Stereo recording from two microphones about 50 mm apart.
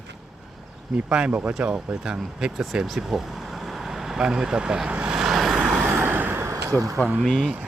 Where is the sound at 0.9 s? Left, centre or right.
Right.